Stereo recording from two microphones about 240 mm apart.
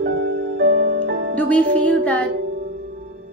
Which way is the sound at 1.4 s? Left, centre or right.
Centre.